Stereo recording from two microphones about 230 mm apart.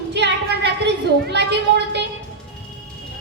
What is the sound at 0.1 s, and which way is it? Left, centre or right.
Children playing, right.